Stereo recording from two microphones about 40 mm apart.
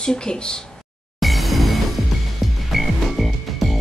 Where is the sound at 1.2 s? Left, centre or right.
Centre.